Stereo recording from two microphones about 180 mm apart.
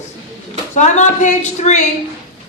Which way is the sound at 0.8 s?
40° left (ahead or behind).